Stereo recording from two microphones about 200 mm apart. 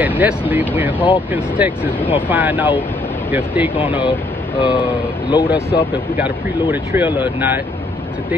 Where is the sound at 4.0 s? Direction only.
25° left (ahead or behind).